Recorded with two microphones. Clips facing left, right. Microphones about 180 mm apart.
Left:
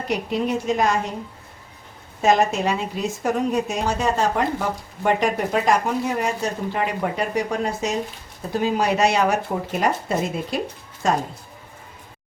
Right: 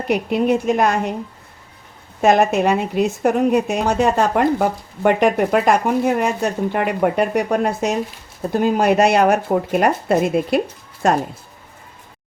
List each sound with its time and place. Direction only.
0.1 s speech: 60° right (ahead or behind)
2.2 s speech: 60° right (ahead or behind)